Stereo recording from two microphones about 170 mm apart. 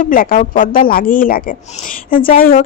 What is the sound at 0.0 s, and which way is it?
Speech, 55° left (ahead or behind).